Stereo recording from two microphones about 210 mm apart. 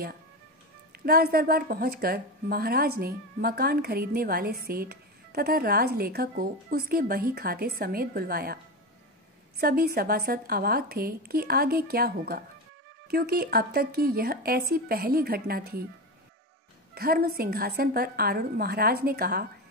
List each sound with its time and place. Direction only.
0.9 s a woman's voice: 45° right (ahead or behind)
9.6 s a woman's voice: 45° right (ahead or behind)
16.9 s a woman's voice: 45° right (ahead or behind)